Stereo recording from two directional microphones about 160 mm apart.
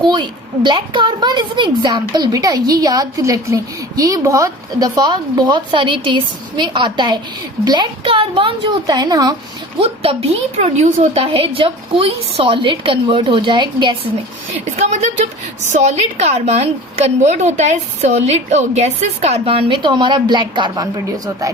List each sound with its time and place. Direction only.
0.0 s a woman's voice: 30° right (ahead or behind)
9.7 s a woman's voice: 35° right (ahead or behind)
14.8 s a woman's voice: 45° right (ahead or behind); by 21.0 s 25° right (ahead or behind)